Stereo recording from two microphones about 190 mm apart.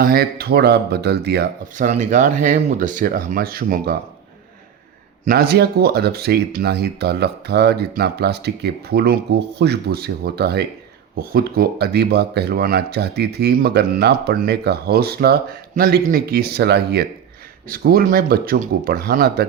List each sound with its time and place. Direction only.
0.0 s speech: 55° right (ahead or behind)
1.7 s speech: 40° right (ahead or behind)
5.2 s speech: 55° right (ahead or behind)